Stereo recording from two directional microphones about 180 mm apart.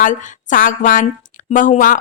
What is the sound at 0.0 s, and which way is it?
A woman's voice, 50° left (ahead or behind).